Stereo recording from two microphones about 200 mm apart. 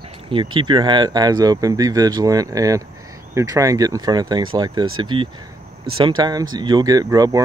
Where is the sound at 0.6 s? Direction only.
25° right (ahead or behind).